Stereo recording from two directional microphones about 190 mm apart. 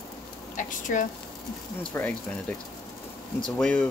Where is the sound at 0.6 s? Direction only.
45° left (ahead or behind).